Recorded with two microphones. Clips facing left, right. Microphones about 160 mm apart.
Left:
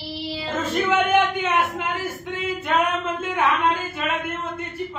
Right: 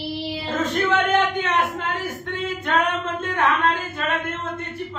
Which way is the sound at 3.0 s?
10° left (ahead or behind).